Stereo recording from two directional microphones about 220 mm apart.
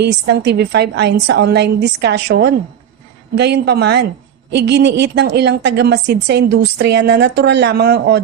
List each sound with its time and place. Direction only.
0.0 s a woman's voice: 50° right (ahead or behind)